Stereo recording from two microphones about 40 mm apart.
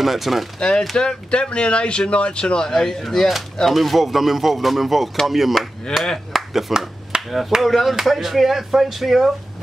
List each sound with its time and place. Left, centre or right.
0.0 s speech: centre
0.6 s speech: centre
2.7 s speech: centre
6.1 s a sound: centre
7.2 s speech: centre